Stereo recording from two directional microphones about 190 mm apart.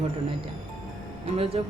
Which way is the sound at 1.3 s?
30° right (ahead or behind).